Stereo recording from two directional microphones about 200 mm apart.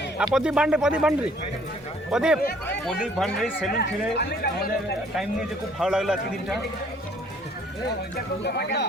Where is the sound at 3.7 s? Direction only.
55° left (ahead or behind).